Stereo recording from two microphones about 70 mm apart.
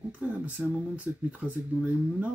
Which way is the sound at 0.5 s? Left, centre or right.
Right.